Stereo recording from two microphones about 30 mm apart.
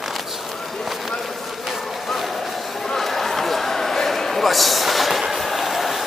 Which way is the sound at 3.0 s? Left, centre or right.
Centre.